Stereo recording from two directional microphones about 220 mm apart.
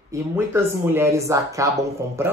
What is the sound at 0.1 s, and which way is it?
Speech, 10° right (ahead or behind).